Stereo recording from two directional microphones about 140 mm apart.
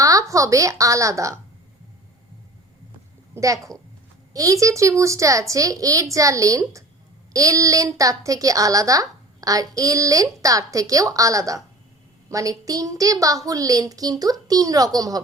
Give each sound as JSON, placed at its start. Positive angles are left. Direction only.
{"t": 0.0, "sound": "a woman's voice", "side_deg": -25}
{"t": 3.3, "sound": "a child's voice", "side_deg": -25}